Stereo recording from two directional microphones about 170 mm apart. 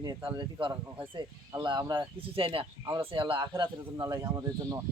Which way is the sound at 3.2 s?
30° right (ahead or behind).